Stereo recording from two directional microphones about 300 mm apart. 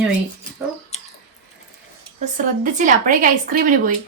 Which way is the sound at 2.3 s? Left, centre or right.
Right.